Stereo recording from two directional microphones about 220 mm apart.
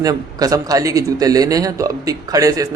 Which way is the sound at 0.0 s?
15° right (ahead or behind).